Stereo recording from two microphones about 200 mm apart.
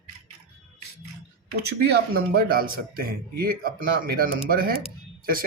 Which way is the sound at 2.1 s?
50° right (ahead or behind).